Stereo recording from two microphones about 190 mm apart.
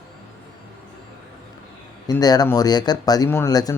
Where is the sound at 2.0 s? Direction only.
20° left (ahead or behind).